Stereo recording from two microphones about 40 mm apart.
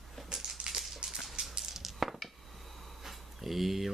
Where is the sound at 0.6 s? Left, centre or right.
Right.